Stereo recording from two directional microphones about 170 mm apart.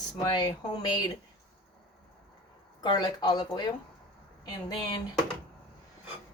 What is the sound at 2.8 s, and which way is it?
Speech, 25° left (ahead or behind).